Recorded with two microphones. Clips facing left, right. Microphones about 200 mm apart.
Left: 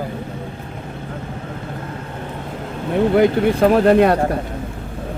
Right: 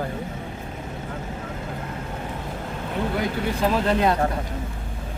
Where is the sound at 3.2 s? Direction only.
60° left (ahead or behind).